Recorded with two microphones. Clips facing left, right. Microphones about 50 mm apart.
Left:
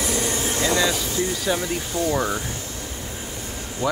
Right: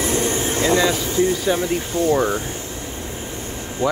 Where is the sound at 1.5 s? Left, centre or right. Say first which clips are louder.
Right 4 dB; centre.